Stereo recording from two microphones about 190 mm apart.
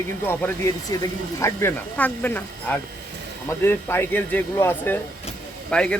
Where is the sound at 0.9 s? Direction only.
20° left (ahead or behind).